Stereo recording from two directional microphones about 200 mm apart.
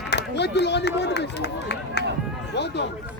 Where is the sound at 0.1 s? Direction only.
60° left (ahead or behind).